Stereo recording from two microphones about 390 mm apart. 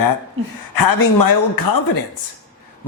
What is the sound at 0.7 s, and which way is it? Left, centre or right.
Speech, left.